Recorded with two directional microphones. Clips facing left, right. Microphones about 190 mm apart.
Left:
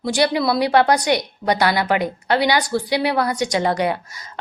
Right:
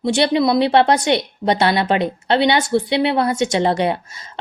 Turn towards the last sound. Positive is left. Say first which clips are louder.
# right 2 dB
turn(degrees=-25)  # may be behind; listen again after turning